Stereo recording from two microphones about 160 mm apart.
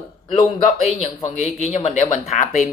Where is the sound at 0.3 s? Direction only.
45° left (ahead or behind).